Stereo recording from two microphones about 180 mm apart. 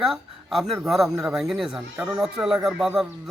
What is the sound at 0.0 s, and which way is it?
A man's voice, centre (ahead or behind).